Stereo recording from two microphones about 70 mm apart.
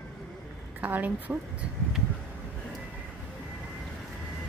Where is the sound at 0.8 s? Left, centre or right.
Right.